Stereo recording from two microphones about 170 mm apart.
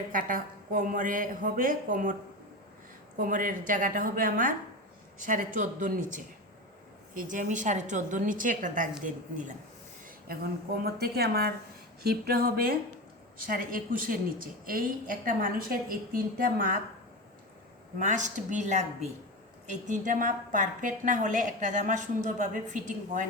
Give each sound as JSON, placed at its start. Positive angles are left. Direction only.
{"t": 0.1, "sound": "a woman's voice", "side_deg": -55}
{"t": 3.2, "sound": "a woman's voice", "side_deg": -50}
{"t": 10.2, "sound": "a woman's voice", "side_deg": -65}
{"t": 18.0, "sound": "a woman's voice", "side_deg": -45}